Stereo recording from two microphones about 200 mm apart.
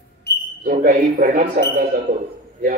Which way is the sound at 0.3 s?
55° left (ahead or behind).